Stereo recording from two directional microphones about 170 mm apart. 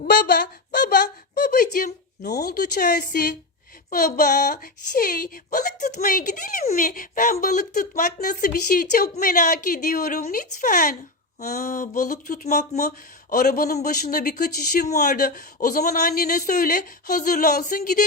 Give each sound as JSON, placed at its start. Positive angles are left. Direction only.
{"t": 0.0, "sound": "a sound", "side_deg": 55}
{"t": 2.4, "sound": "speech", "side_deg": 65}
{"t": 14.8, "sound": "speech", "side_deg": 50}